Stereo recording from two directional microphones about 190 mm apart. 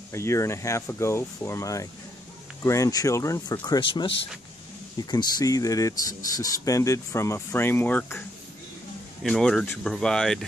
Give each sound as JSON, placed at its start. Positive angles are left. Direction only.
{"t": 0.1, "sound": "speech", "side_deg": 15}
{"t": 9.2, "sound": "speech", "side_deg": 5}